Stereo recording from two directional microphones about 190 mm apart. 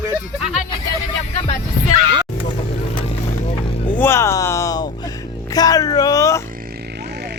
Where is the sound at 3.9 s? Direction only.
15° left (ahead or behind).